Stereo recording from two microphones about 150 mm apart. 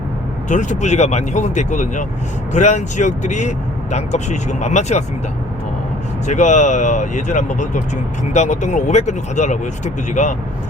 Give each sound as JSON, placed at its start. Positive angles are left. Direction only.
{"t": 0.4, "sound": "speech", "side_deg": 55}
{"t": 6.2, "sound": "speech", "side_deg": 50}